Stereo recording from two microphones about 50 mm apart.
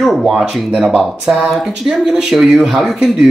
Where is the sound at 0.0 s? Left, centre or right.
Centre.